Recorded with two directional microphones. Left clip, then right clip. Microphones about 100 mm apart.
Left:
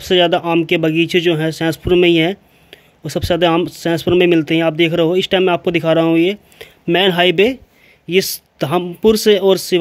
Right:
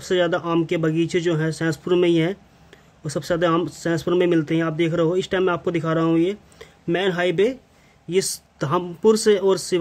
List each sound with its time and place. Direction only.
0.0 s speech: 25° left (ahead or behind)
6.9 s speech: 40° left (ahead or behind)
8.1 s speech: 20° left (ahead or behind)